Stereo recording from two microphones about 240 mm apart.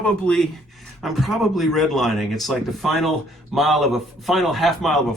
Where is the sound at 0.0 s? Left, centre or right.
Centre.